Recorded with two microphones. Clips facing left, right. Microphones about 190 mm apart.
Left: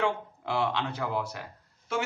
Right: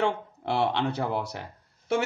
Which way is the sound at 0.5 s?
65° right (ahead or behind).